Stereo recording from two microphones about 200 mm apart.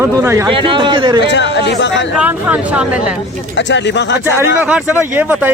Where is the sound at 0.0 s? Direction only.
15° right (ahead or behind).